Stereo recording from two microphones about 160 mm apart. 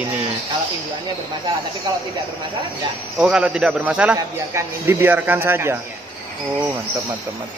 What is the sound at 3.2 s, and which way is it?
A man's voice, 5° right (ahead or behind).